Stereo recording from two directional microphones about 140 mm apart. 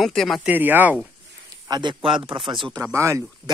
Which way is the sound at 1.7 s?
35° right (ahead or behind).